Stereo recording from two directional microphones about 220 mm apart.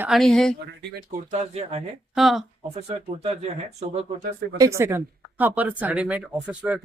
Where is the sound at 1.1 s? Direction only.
30° right (ahead or behind).